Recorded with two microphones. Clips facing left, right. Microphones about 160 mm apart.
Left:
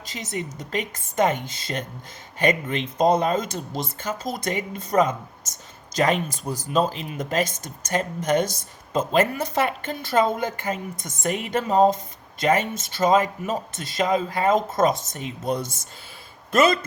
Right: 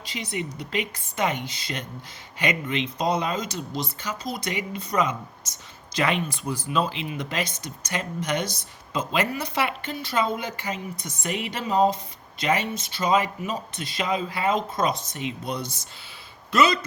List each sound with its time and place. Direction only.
0.0 s speech: 45° left (ahead or behind)